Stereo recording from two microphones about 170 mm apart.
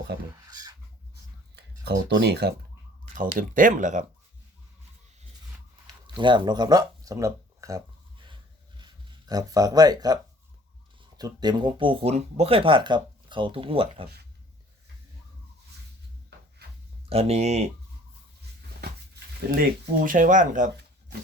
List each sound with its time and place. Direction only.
0.4 s a sound: 20° right (ahead or behind)
1.5 s speech: 80° right
3.2 s speech: 50° right (ahead or behind)
6.1 s speech: 30° right (ahead or behind)
8.8 s speech: 25° right (ahead or behind)
11.2 s speech: 25° right (ahead or behind)
17.1 s speech: 35° right (ahead or behind)
20.1 s speech: 50° right (ahead or behind)